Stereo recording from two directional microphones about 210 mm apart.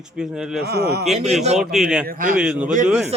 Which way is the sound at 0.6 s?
50° right (ahead or behind).